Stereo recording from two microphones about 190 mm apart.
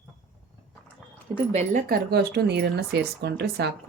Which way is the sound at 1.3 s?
35° right (ahead or behind).